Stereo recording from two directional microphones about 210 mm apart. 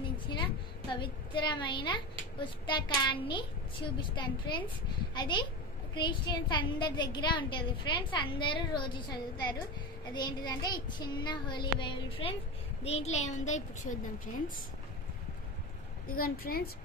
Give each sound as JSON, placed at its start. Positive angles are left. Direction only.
{"t": 0.3, "sound": "a woman's voice", "side_deg": 20}
{"t": 16.1, "sound": "a woman's voice", "side_deg": 45}